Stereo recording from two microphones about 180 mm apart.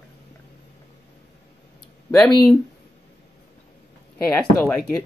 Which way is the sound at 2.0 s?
5° left (ahead or behind).